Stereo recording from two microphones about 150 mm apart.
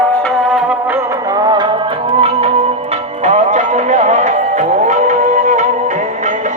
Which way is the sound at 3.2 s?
55° right (ahead or behind).